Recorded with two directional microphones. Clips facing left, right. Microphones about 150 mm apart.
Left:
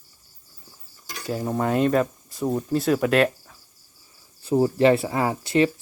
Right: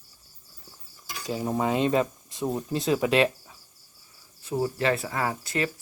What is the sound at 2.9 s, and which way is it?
Speech, 20° right (ahead or behind).